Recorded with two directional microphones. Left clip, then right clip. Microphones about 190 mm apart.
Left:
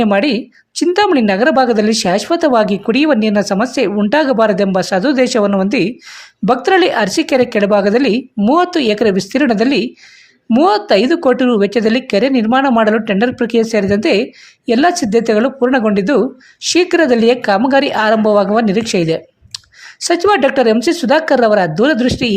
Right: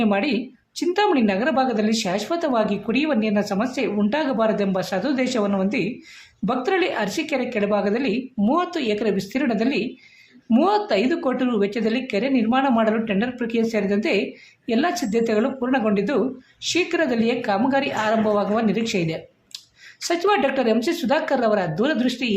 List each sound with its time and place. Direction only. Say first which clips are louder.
0.0 s a woman's voice: left 9 dB; 45° left (ahead or behind)